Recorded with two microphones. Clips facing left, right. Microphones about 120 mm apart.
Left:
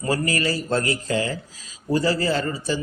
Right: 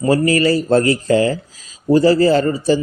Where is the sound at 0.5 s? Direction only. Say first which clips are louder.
Right 9 dB; 35° right (ahead or behind).